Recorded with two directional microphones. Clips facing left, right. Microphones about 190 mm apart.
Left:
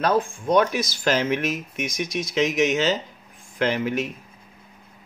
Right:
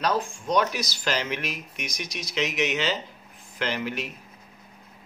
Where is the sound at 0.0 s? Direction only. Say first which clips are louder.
Left 5 dB; 55° left (ahead or behind).